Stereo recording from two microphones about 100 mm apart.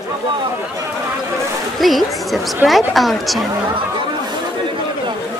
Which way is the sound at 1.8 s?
Centre (ahead or behind).